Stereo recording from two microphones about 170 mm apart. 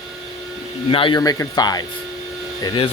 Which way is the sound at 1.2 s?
20° left (ahead or behind).